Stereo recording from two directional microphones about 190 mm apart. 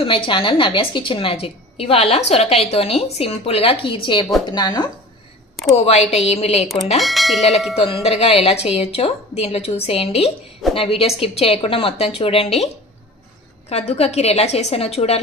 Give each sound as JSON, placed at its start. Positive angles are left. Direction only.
{"t": 0.0, "sound": "a woman's voice", "side_deg": 30}
{"t": 5.8, "sound": "a woman's voice", "side_deg": 35}
{"t": 7.0, "sound": "speech", "side_deg": 0}
{"t": 7.7, "sound": "a woman's voice", "side_deg": 30}
{"t": 13.7, "sound": "a woman's voice", "side_deg": 35}